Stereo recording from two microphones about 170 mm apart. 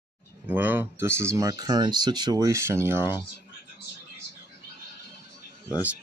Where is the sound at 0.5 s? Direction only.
10° right (ahead or behind).